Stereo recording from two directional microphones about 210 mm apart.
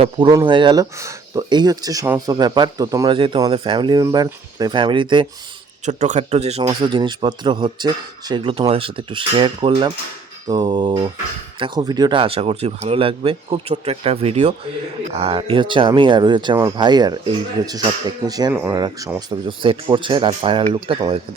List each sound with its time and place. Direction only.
0.0 s speech: 20° right (ahead or behind)
5.8 s speech: 35° right (ahead or behind)